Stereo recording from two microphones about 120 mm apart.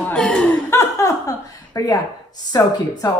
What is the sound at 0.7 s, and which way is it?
Speech, 20° left (ahead or behind).